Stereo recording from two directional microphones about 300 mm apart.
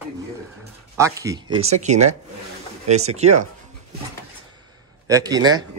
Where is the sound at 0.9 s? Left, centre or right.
Centre.